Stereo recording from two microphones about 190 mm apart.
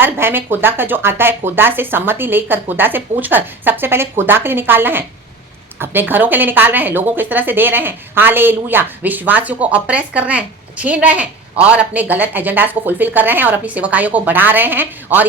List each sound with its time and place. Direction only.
0.0 s a woman's voice: 10° right (ahead or behind)